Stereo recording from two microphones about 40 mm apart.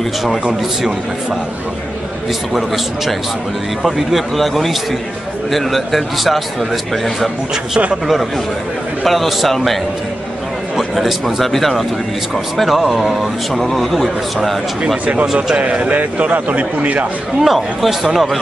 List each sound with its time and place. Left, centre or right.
2.5 s a man's voice: centre
9.0 s a man's voice: centre
10.8 s a man's voice: centre
15.5 s a man's voice: right
17.4 s a man's voice: centre